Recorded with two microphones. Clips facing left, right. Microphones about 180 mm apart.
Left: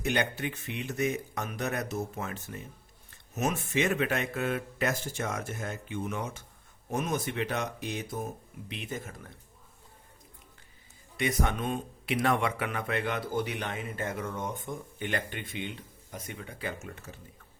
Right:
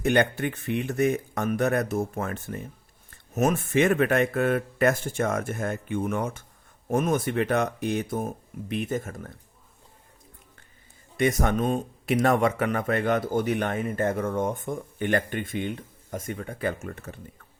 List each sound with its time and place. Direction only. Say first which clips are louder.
0.0 s speech: right 7 dB; 55° right (ahead or behind)
11.2 s speech: right 7 dB; 45° right (ahead or behind)